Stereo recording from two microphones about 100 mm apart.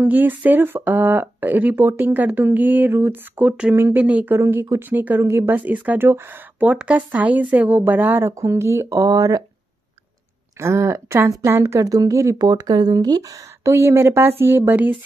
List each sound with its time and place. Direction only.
0.0 s speech: 20° right (ahead or behind); by 9.4 s 35° right (ahead or behind)
10.6 s speech: 25° right (ahead or behind)
13.7 s speech: 25° right (ahead or behind)